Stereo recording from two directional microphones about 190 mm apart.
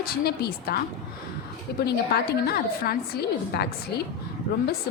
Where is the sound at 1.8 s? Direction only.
55° left (ahead or behind).